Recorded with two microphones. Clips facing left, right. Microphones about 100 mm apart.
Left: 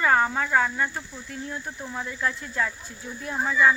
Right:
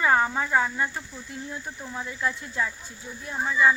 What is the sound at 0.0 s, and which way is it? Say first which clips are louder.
Speech: left 1 dB; 10° right (ahead or behind).